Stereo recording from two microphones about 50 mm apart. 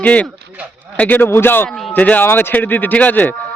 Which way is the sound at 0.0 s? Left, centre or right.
Left.